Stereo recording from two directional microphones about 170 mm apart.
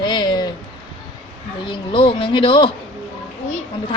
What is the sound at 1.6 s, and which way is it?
Speech, 30° left (ahead or behind).